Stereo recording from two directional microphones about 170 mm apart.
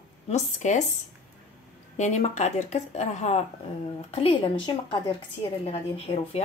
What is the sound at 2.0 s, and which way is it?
A woman's voice, 40° left (ahead or behind).